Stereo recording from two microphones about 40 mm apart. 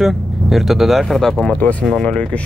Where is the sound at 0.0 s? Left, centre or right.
Centre.